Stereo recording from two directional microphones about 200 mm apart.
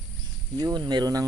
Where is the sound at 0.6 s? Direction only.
20° right (ahead or behind).